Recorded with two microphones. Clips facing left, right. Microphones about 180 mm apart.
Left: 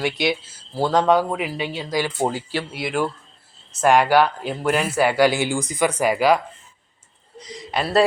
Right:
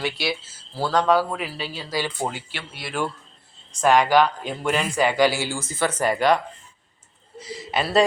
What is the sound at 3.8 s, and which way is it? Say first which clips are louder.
Speech: left 1 dB; 10° left (ahead or behind).